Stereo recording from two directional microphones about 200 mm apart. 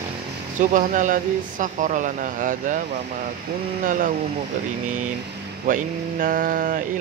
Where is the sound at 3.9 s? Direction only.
40° right (ahead or behind).